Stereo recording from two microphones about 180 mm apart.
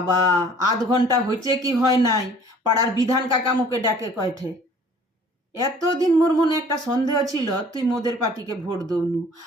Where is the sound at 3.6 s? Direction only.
20° right (ahead or behind).